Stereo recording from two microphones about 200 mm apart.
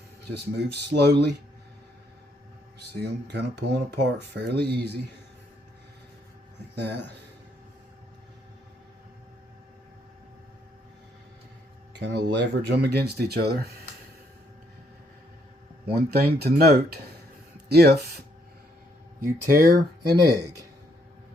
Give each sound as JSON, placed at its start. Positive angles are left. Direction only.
{"t": 0.3, "sound": "speech", "side_deg": -55}
{"t": 2.9, "sound": "speech", "side_deg": -55}
{"t": 11.9, "sound": "speech", "side_deg": -60}
{"t": 16.0, "sound": "speech", "side_deg": -50}
{"t": 19.2, "sound": "speech", "side_deg": -45}